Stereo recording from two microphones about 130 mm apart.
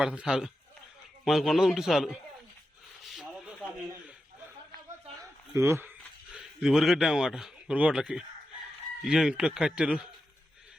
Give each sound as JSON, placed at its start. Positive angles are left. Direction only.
{"t": 0.0, "sound": "a man's voice", "side_deg": -5}
{"t": 3.0, "sound": "rub", "side_deg": -5}
{"t": 5.5, "sound": "speech", "side_deg": -20}
{"t": 6.3, "sound": "speech", "side_deg": -5}